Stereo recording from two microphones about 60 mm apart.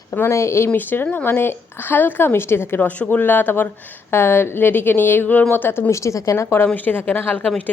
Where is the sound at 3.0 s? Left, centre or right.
Left.